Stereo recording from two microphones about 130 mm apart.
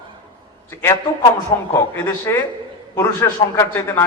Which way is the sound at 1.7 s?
15° left (ahead or behind).